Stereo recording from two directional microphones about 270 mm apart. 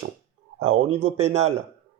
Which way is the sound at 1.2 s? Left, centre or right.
Right.